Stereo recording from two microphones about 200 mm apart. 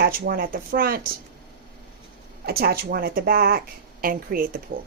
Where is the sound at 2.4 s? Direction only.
50° right (ahead or behind).